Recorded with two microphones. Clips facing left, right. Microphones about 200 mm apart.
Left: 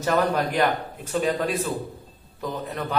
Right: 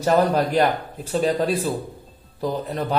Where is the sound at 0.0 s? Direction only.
35° right (ahead or behind).